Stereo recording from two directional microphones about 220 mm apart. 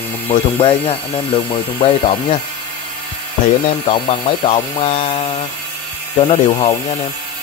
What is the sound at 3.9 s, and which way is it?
Speech, 25° left (ahead or behind).